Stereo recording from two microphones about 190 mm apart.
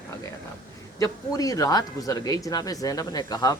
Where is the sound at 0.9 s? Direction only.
20° left (ahead or behind).